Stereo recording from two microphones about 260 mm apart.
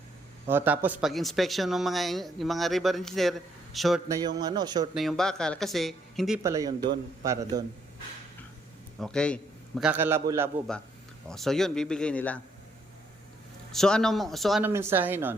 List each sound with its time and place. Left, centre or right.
0.4 s speech: centre
4.4 s a man's voice: centre
4.9 s speech: centre
6.4 s a man's voice: centre
9.0 s speech: centre
11.3 s speech: centre
13.7 s speech: centre